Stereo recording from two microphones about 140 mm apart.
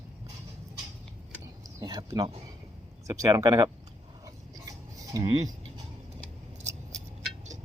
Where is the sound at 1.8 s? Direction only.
30° right (ahead or behind).